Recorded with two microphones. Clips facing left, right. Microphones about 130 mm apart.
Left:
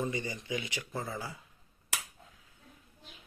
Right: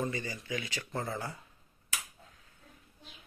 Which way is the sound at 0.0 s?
15° left (ahead or behind).